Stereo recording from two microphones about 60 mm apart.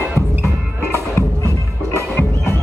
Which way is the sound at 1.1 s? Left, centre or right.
Left.